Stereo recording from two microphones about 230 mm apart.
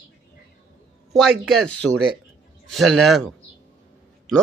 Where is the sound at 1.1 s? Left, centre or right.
Centre.